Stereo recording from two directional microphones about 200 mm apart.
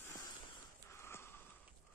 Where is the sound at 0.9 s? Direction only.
10° left (ahead or behind).